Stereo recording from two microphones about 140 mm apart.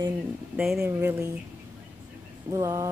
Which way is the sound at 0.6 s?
5° right (ahead or behind).